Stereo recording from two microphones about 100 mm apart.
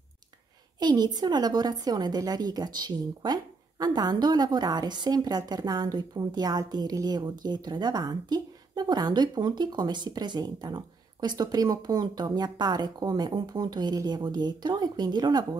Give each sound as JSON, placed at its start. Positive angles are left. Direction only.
{"t": 0.7, "sound": "a woman's voice", "side_deg": -45}